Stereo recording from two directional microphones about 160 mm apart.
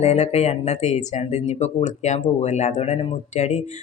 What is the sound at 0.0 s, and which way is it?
Speech, 40° left (ahead or behind).